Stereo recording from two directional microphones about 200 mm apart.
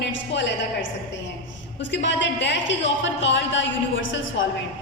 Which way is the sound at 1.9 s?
65° left (ahead or behind).